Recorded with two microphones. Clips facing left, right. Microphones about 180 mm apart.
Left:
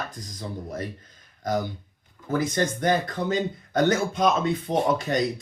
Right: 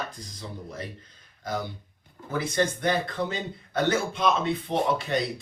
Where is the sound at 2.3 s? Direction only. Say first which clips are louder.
Left 2 dB; 45° left (ahead or behind).